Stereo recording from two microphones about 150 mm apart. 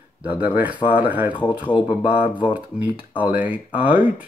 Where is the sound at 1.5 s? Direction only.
30° left (ahead or behind).